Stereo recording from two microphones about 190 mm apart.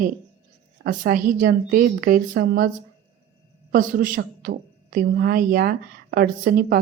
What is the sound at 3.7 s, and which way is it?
A woman's voice, 45° right (ahead or behind).